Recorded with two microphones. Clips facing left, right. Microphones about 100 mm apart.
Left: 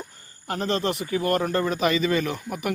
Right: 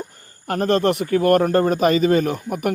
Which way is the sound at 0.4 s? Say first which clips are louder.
Right 7 dB; 50° right (ahead or behind).